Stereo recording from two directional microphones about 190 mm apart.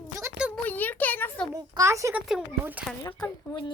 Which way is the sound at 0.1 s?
15° right (ahead or behind).